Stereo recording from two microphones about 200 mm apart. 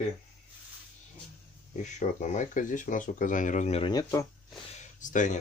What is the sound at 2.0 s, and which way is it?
Speech, 40° left (ahead or behind).